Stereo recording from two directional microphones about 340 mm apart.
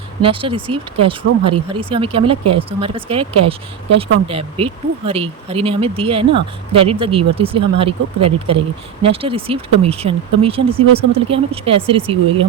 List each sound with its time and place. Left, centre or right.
0.2 s speech: centre